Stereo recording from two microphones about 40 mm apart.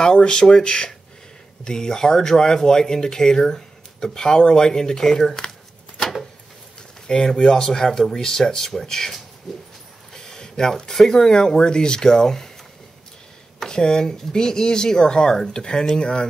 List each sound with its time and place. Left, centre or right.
0.0 s speech: left
7.1 s speech: left
13.6 s speech: centre